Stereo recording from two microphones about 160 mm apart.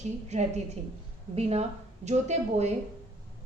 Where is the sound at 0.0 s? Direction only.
45° right (ahead or behind).